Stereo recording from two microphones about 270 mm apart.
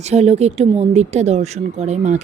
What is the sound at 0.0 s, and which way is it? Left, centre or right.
Speech, right.